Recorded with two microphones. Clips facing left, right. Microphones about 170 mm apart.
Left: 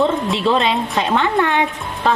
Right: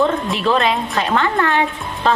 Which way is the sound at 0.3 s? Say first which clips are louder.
Right 1 dB; 25° left (ahead or behind).